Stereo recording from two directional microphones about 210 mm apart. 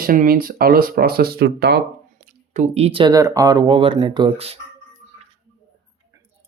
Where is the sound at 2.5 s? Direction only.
30° right (ahead or behind).